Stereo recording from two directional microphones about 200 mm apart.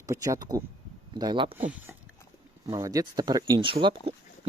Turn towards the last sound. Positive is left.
turn(degrees=-25)  # may be behind; listen again after turning